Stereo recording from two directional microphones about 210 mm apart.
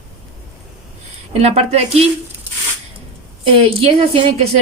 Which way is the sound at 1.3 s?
30° right (ahead or behind).